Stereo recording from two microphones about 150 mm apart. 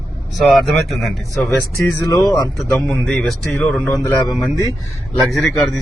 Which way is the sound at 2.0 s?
20° left (ahead or behind).